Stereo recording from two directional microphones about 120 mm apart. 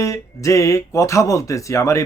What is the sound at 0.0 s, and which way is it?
A man's voice, 25° left (ahead or behind).